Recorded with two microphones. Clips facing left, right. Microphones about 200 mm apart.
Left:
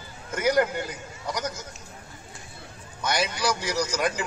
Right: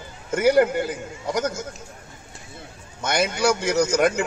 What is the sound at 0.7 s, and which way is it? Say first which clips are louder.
Speech: right 7 dB; 50° right (ahead or behind).